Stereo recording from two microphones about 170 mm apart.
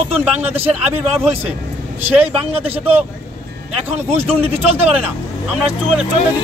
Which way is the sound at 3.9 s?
35° right (ahead or behind).